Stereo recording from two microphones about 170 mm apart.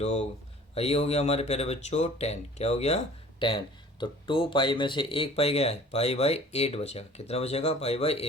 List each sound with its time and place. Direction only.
0.0 s speech: 40° left (ahead or behind)